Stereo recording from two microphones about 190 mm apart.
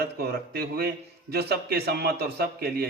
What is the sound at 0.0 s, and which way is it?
A man's voice, 55° right (ahead or behind).